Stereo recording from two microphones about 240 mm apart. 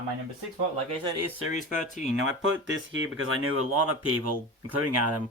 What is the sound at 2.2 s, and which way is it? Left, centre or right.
Speech, right.